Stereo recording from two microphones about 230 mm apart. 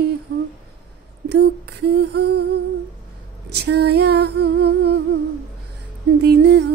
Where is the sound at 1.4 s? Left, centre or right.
Right.